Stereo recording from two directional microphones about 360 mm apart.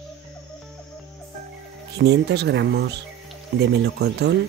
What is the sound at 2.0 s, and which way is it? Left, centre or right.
Speech, right.